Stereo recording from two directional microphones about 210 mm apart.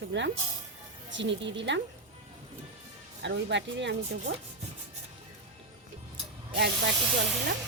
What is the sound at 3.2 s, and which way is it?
Speech, 60° right (ahead or behind).